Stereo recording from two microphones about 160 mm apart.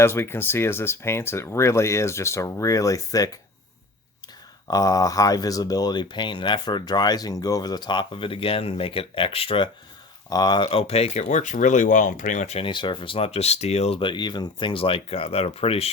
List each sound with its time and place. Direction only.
0.0 s speech: 15° left (ahead or behind)
4.7 s speech: 20° left (ahead or behind)
10.2 s speech: 25° left (ahead or behind)